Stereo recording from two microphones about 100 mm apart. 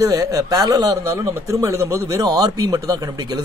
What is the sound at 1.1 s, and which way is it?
A man's voice, 30° right (ahead or behind).